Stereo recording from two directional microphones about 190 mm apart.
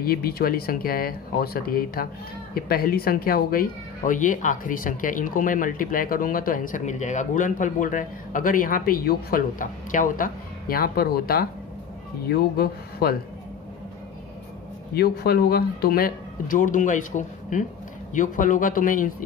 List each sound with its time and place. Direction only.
0.0 s speech: 50° left (ahead or behind)
15.0 s speech: 55° left (ahead or behind)